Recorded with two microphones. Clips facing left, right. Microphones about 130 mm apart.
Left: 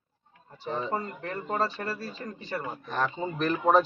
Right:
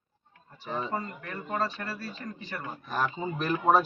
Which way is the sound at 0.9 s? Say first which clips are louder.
Left 2 dB; 30° left (ahead or behind).